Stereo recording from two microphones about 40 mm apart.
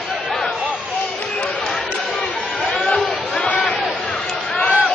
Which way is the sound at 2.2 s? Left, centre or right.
Left.